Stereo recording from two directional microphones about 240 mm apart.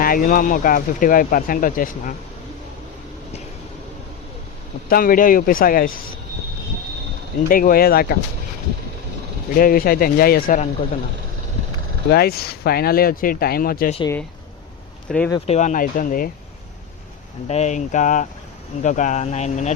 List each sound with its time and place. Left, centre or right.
0.0 s speech: left
4.9 s speech: left
7.4 s speech: left
9.6 s speech: left
12.1 s speech: left
15.3 s speech: left
17.5 s speech: left